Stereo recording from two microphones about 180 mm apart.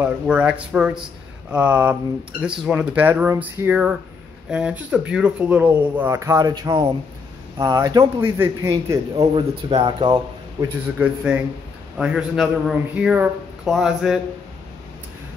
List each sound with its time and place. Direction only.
0.0 s a man's voice: 5° right (ahead or behind)
9.2 s a man's voice: 30° right (ahead or behind)
11.0 s a man's voice: 5° right (ahead or behind)